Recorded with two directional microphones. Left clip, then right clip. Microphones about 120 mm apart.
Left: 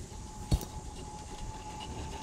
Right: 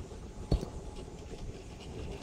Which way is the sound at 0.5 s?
50° right (ahead or behind).